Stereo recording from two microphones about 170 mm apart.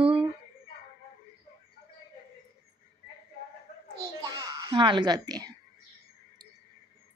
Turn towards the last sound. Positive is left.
turn(degrees=-25)  # may be behind; listen again after turning